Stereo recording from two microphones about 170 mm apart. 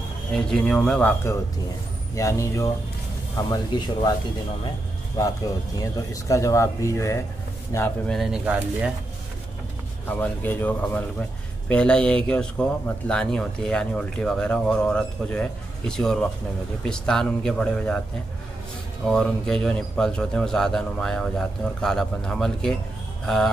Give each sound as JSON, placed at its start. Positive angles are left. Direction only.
{"t": 0.3, "sound": "speech", "side_deg": 5}
{"t": 5.8, "sound": "speech", "side_deg": 20}
{"t": 8.1, "sound": "speech", "side_deg": -5}
{"t": 10.0, "sound": "speech", "side_deg": 10}
{"t": 19.0, "sound": "speech", "side_deg": 5}